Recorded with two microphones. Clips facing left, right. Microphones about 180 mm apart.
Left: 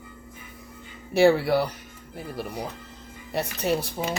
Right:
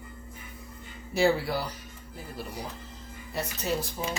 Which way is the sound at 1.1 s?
65° left (ahead or behind).